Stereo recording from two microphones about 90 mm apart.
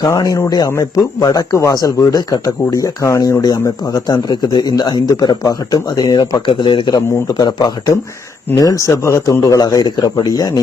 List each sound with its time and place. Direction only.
0.1 s a man's voice: 40° left (ahead or behind)
6.5 s a man's voice: 65° left (ahead or behind)
6.9 s a man's voice: 40° left (ahead or behind)